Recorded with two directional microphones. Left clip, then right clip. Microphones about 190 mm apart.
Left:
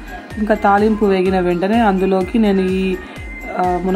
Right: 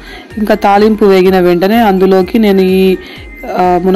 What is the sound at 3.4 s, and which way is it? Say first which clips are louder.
Music: right 8 dB; 25° right (ahead or behind).